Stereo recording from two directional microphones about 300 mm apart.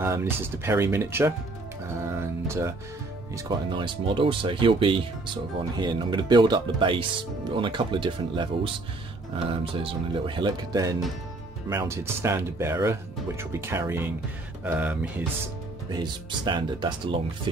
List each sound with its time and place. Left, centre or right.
0.0 s speech: centre
2.4 s speech: centre